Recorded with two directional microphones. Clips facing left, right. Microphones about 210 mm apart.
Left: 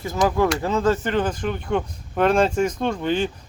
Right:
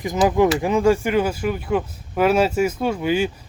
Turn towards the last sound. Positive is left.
turn(degrees=-10)  # may be behind; listen again after turning